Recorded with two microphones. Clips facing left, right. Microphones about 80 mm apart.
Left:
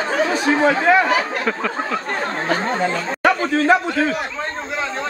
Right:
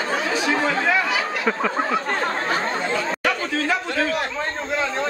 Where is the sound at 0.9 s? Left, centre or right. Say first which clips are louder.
Left 6 dB; left.